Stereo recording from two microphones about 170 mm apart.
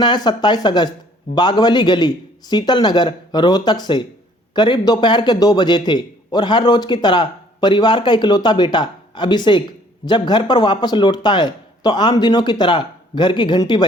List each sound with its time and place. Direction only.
0.0 s a man's voice: 25° left (ahead or behind)